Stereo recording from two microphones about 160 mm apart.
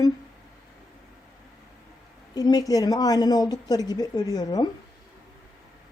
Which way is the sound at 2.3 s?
25° left (ahead or behind).